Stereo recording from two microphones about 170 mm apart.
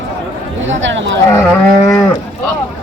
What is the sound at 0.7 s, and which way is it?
Speech, 90° right.